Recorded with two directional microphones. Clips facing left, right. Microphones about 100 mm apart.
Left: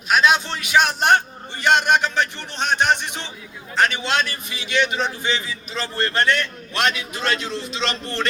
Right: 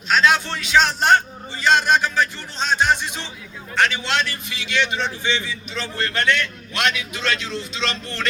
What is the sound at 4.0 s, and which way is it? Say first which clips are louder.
Speech: left 1 dB; 20° left (ahead or behind).